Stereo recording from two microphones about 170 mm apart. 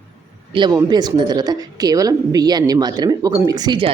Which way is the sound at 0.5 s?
25° right (ahead or behind).